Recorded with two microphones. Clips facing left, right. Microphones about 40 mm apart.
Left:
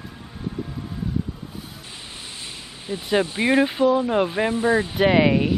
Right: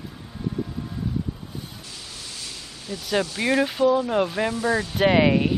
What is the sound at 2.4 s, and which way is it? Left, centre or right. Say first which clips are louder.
Speech: left 1 dB; left.